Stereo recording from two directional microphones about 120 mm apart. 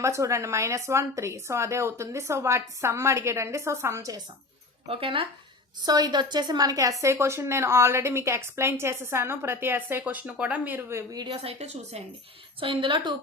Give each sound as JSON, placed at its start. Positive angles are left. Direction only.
{"t": 0.0, "sound": "a woman's voice", "side_deg": -25}
{"t": 4.9, "sound": "a woman's voice", "side_deg": -50}
{"t": 5.8, "sound": "a woman's voice", "side_deg": -35}
{"t": 11.4, "sound": "a woman's voice", "side_deg": -65}
{"t": 12.5, "sound": "a woman's voice", "side_deg": -45}